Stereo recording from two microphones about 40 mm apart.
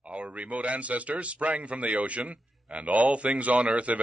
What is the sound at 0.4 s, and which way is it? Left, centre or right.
Speech, right.